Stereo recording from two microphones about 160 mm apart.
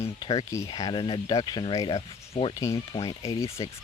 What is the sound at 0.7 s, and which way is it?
Speech, 30° left (ahead or behind).